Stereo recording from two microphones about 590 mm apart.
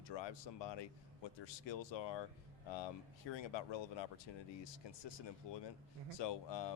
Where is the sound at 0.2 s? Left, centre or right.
Left.